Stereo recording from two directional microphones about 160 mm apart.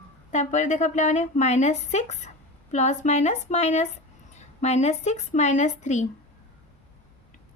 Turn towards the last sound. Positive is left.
turn(degrees=50)  # may be behind; listen again after turning